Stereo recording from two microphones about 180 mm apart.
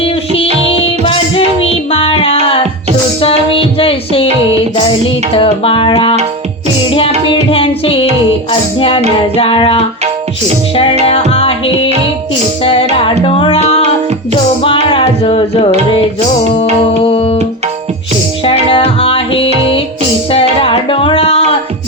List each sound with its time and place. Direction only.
1.9 s music: 30° left (ahead or behind)
3.2 s music: 30° left (ahead or behind)
7.5 s music: 30° left (ahead or behind)
9.3 s music: 30° left (ahead or behind)
11.3 s music: 30° left (ahead or behind)
13.2 s music: 30° left (ahead or behind)
14.9 s music: 30° left (ahead or behind)
17.0 s tabla: 30° left (ahead or behind)
18.7 s music: 30° left (ahead or behind)